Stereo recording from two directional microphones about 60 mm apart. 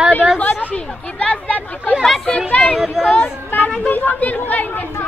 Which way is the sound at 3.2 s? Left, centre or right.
Left.